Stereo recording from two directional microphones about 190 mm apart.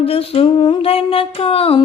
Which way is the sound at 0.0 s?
30° left (ahead or behind).